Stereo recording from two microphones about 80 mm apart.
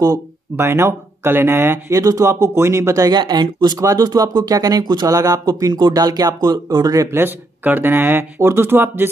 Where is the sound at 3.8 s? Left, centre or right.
Right.